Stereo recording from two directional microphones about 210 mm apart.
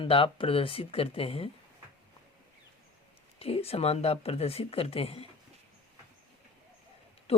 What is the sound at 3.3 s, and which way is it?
A woman's voice, 30° left (ahead or behind).